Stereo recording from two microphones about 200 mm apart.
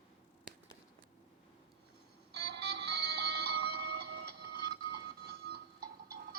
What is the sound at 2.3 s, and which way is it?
Music, 55° right (ahead or behind).